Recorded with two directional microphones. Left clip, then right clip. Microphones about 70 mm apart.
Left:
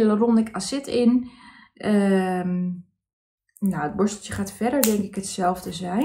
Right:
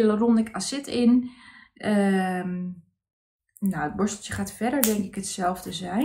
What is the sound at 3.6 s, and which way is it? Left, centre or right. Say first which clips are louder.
A woman's voice: left 3 dB; left.